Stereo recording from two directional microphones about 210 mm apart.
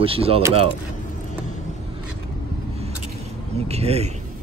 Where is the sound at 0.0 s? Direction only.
25° right (ahead or behind).